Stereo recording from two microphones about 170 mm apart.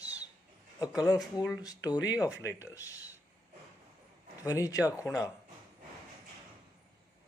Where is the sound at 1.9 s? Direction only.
10° right (ahead or behind).